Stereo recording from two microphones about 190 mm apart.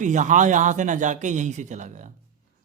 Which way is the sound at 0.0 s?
40° right (ahead or behind).